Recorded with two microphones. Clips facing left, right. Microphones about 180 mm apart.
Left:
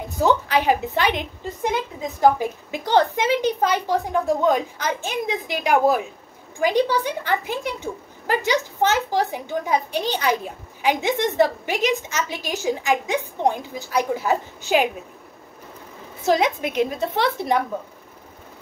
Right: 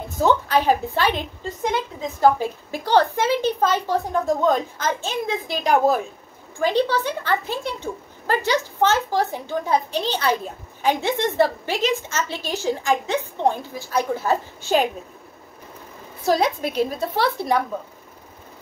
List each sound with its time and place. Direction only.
0.6 s speech: 15° left (ahead or behind)
17.1 s speech: 20° left (ahead or behind)